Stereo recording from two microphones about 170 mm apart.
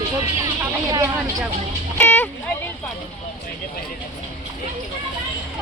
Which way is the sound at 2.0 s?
10° left (ahead or behind).